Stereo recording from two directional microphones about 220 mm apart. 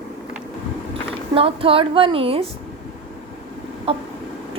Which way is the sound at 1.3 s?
25° right (ahead or behind).